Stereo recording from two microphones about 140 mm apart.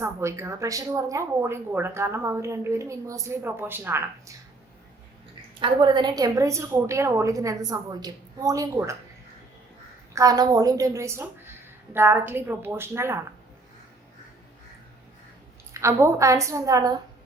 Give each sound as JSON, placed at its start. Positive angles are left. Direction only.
{"t": 0.0, "sound": "speech", "side_deg": -20}
{"t": 5.5, "sound": "speech", "side_deg": -35}
{"t": 10.2, "sound": "a woman's voice", "side_deg": -25}
{"t": 15.7, "sound": "speech", "side_deg": -20}